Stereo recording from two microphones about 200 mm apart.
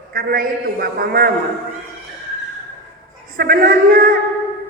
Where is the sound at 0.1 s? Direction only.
45° right (ahead or behind).